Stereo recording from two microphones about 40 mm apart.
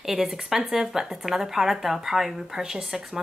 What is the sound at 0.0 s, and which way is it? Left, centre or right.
Speech, centre.